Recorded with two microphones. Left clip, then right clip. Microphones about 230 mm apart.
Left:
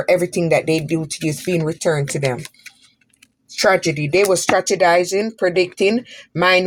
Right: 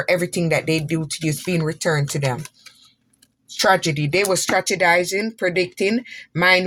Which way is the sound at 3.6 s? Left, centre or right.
Right.